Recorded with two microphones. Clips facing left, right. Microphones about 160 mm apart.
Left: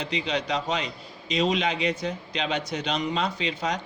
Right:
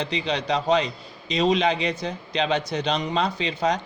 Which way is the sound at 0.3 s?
30° right (ahead or behind).